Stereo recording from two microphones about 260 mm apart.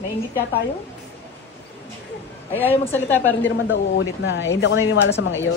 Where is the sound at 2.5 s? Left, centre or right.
Centre.